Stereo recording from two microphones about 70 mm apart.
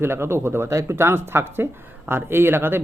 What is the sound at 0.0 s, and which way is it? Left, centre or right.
Speech, right.